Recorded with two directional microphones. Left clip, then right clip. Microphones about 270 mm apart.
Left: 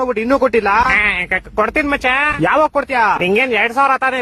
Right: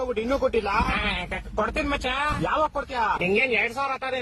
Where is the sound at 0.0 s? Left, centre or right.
Left.